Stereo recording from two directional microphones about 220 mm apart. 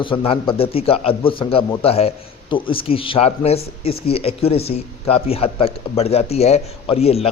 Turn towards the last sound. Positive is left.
turn(degrees=25)  # may be behind; listen again after turning